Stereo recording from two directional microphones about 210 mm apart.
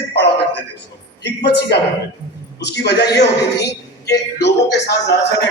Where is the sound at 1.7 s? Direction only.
50° left (ahead or behind).